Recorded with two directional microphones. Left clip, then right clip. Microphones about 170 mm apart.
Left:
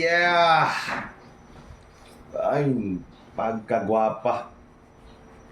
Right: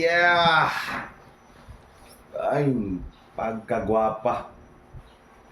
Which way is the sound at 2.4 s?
20° right (ahead or behind).